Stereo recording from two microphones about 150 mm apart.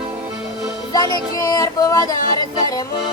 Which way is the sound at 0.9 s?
25° left (ahead or behind).